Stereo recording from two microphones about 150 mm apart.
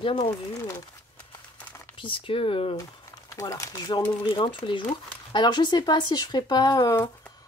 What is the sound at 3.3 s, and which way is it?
Speech, 20° left (ahead or behind).